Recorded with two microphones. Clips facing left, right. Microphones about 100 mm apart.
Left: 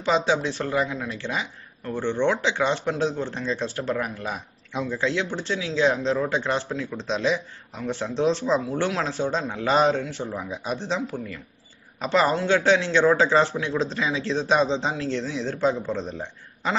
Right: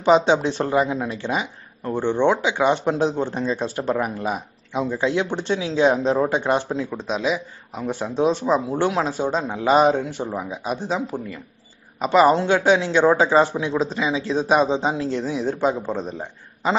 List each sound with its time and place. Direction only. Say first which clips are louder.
0.0 s speech: right 6 dB; 20° right (ahead or behind)
7.0 s speech: left 2 dB; 10° right (ahead or behind)
12.0 s speech: right 6 dB; 10° right (ahead or behind)